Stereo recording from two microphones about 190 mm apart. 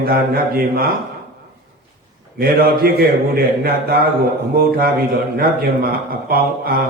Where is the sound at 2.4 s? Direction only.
50° right (ahead or behind).